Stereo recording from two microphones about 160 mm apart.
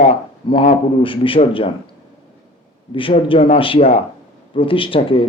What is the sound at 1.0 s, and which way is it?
Speech, 35° left (ahead or behind).